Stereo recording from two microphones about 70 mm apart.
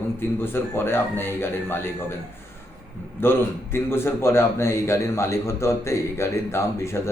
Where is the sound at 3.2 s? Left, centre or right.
Left.